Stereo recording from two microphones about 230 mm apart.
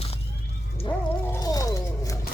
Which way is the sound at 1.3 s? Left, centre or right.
Centre.